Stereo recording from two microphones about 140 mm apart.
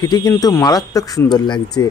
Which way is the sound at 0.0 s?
25° left (ahead or behind).